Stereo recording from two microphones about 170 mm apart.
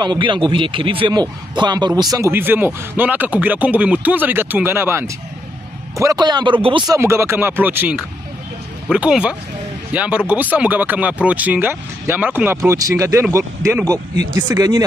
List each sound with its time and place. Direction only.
0.0 s a man's voice: 25° right (ahead or behind)
7.0 s a man's voice: 15° right (ahead or behind)